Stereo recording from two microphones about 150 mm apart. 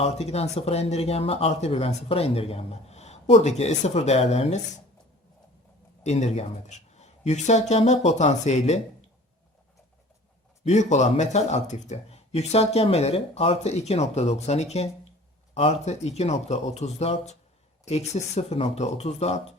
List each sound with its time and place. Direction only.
0.0 s speech: 45° left (ahead or behind)
6.0 s speech: 50° left (ahead or behind)
10.6 s speech: 50° left (ahead or behind)